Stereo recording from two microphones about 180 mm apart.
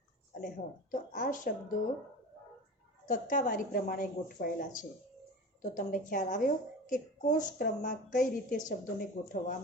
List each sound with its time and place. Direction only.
0.4 s a woman's voice: 50° left (ahead or behind)
3.1 s a woman's voice: 45° left (ahead or behind)